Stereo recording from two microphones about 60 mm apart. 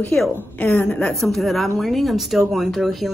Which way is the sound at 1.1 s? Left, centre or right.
Centre.